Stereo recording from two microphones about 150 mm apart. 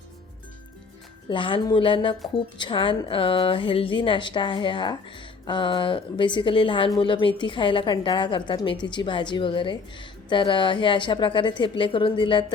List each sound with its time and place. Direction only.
1.3 s a woman's voice: 35° left (ahead or behind)